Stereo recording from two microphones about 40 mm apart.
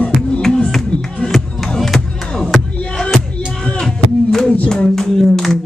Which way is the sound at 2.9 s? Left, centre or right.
Centre.